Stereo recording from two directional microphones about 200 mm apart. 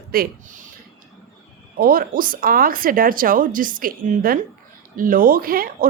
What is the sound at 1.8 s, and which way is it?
Speech, 45° right (ahead or behind).